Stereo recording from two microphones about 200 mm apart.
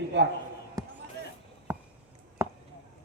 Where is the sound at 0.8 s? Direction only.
15° right (ahead or behind).